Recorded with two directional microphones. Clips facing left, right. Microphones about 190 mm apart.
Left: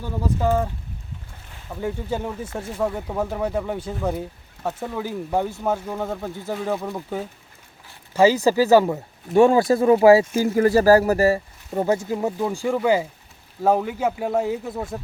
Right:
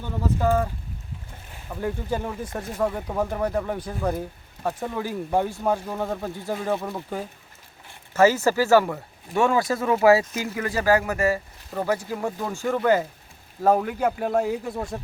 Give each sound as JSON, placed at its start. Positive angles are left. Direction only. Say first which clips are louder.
{"t": 0.0, "sound": "speech", "louder": "left 1 dB", "side_deg": 10}
{"t": 1.7, "sound": "speech", "louder": "left 1 dB", "side_deg": 0}
{"t": 8.1, "sound": "speech", "louder": "left 2 dB", "side_deg": 15}
{"t": 10.5, "sound": "speech", "louder": "left 7 dB", "side_deg": 40}